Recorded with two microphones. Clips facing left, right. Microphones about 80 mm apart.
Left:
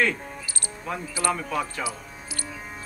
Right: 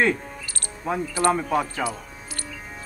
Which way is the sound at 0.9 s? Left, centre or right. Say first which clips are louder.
Right 6 dB; right.